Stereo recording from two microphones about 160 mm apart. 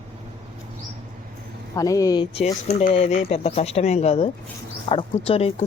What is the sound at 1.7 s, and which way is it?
Speech, 20° left (ahead or behind).